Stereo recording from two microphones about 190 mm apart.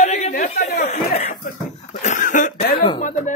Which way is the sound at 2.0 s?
40° left (ahead or behind).